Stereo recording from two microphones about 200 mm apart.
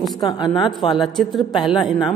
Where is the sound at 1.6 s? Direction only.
Centre (ahead or behind).